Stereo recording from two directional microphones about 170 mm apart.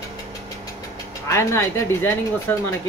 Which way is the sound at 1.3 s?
15° left (ahead or behind).